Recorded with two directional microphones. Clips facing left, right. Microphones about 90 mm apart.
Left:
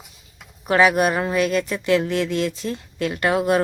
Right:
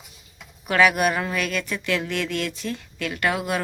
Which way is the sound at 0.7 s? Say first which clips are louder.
Left 3 dB; 30° left (ahead or behind).